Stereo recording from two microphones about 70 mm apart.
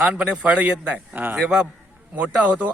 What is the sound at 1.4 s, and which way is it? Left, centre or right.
Speech, centre.